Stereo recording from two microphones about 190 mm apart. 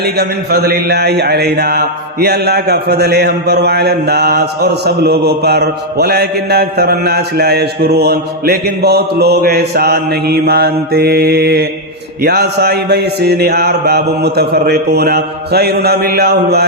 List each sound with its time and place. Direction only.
0.0 s a man's voice: 55° right (ahead or behind)